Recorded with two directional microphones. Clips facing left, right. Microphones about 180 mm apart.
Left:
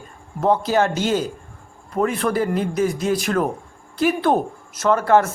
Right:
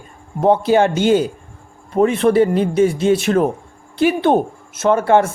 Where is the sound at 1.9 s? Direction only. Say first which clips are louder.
Right 7 dB; 25° right (ahead or behind).